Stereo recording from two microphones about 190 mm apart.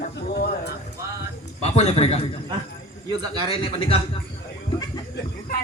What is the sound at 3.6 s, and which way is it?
Speech, 30° left (ahead or behind).